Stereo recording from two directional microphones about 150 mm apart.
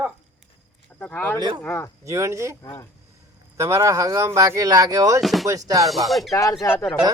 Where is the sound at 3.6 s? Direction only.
20° right (ahead or behind).